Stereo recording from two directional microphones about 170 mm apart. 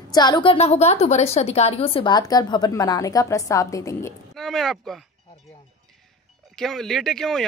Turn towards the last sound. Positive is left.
turn(degrees=0)  # may be behind; listen again after turning